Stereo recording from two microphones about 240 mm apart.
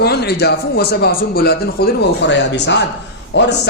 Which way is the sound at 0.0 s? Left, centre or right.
Left.